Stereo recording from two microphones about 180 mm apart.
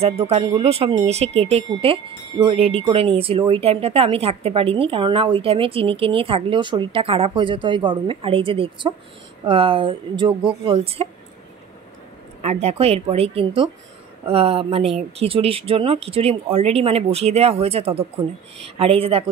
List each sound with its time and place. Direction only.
0.0 s a woman's voice: 35° right (ahead or behind)
12.4 s a woman's voice: 35° right (ahead or behind)